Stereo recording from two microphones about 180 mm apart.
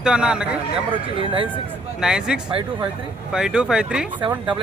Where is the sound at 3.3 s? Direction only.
5° right (ahead or behind).